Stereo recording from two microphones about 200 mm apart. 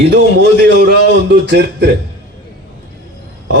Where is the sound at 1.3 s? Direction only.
60° right (ahead or behind).